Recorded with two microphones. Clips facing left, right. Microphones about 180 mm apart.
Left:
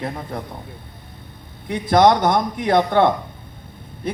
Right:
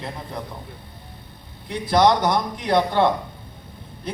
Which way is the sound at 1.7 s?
50° left (ahead or behind).